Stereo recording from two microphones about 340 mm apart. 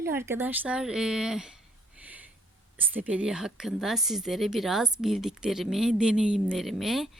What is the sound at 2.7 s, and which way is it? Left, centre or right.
Speech, centre.